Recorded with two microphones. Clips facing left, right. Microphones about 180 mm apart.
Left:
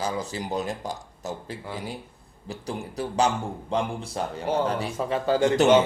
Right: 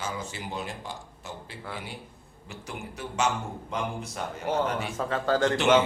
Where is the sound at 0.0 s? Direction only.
35° left (ahead or behind).